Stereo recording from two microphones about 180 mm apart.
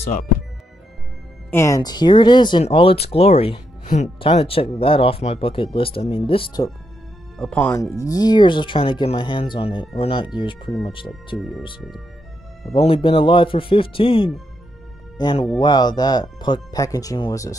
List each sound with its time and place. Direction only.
1.5 s speech: 15° left (ahead or behind); by 3.6 s 35° left (ahead or behind)
3.8 s speech: 45° left (ahead or behind)
4.2 s speech: 30° left (ahead or behind)
7.3 s speech: 5° left (ahead or behind); by 11.1 s 30° left (ahead or behind)
12.7 s speech: 30° left (ahead or behind)